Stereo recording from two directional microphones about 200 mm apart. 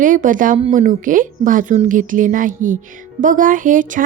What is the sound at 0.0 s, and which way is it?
Speech, 40° right (ahead or behind).